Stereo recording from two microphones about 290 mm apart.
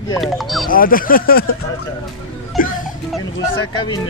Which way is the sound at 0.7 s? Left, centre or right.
Left.